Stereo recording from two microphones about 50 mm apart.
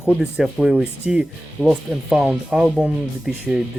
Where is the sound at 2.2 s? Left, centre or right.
Right.